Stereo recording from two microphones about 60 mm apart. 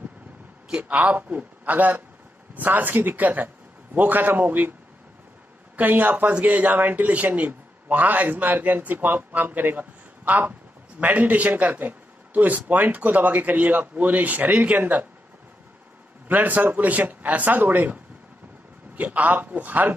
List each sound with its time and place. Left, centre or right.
0.7 s speech: right
5.8 s speech: right
16.3 s speech: right
18.9 s speech: right